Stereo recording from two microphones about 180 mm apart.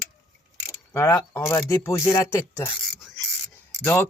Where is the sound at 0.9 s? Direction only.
15° left (ahead or behind).